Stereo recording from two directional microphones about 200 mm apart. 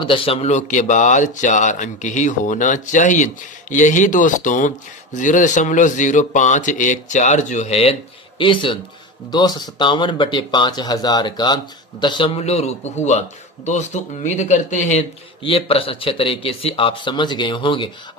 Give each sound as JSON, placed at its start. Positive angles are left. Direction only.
{"t": 0.0, "sound": "a man's voice", "side_deg": 25}